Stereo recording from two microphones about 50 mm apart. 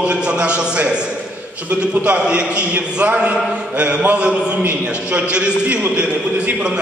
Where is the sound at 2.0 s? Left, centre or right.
Right.